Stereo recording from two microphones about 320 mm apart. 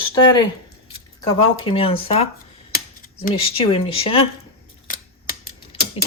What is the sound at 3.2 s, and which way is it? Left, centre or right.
Speech, centre.